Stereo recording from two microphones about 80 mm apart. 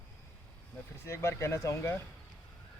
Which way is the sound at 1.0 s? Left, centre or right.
Left.